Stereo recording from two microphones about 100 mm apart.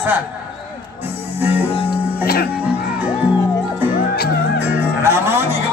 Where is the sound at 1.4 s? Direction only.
20° right (ahead or behind).